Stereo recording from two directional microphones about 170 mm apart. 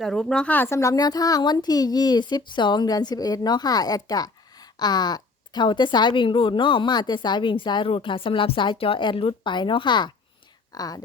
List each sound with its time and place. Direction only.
0.0 s a woman's voice: 5° left (ahead or behind); by 11.0 s 20° left (ahead or behind)